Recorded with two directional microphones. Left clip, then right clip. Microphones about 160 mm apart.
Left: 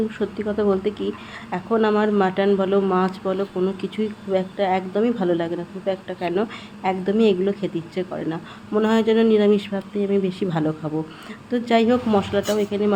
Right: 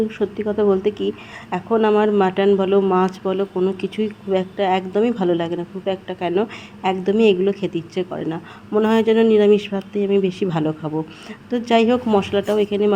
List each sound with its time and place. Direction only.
0.2 s a woman's voice: 15° right (ahead or behind)